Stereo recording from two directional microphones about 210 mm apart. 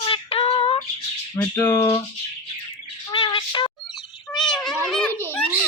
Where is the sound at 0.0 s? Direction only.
25° left (ahead or behind).